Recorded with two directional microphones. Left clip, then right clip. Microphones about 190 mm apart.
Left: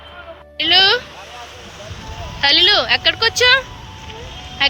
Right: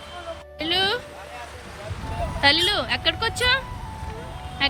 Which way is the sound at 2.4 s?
10° right (ahead or behind).